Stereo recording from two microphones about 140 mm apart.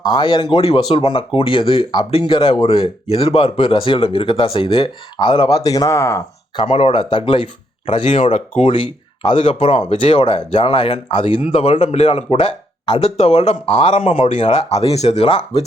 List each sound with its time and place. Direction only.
0.0 s speech: 30° left (ahead or behind)
6.6 s speech: 40° left (ahead or behind)